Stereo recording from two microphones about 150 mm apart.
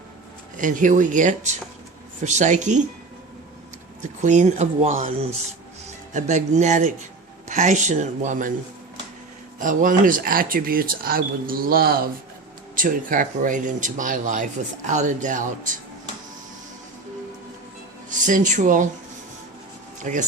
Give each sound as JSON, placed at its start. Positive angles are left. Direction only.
{"t": 0.5, "sound": "speech", "side_deg": -60}
{"t": 4.0, "sound": "speech", "side_deg": -55}
{"t": 9.6, "sound": "speech", "side_deg": -60}
{"t": 12.7, "sound": "speech", "side_deg": -65}
{"t": 18.1, "sound": "speech", "side_deg": -60}
{"t": 20.1, "sound": "speech", "side_deg": -60}